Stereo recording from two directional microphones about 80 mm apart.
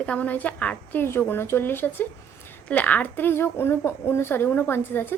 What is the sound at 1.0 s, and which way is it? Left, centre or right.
A woman's voice, left.